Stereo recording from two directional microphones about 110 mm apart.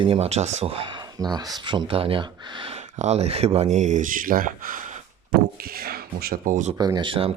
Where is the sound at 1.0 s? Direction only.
40° right (ahead or behind).